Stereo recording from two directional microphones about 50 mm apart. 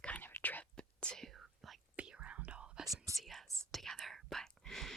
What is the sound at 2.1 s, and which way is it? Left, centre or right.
Whispering, right.